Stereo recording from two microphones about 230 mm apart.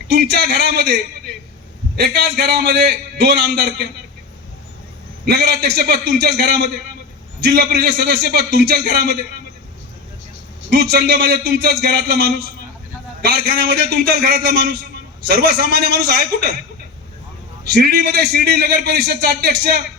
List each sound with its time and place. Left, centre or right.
0.1 s a man's voice: right
2.0 s a man's voice: right
5.7 s a man's voice: right
10.7 s a man's voice: right
17.7 s a man's voice: right